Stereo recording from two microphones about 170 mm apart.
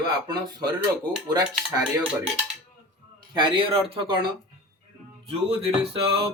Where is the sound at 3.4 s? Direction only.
30° right (ahead or behind).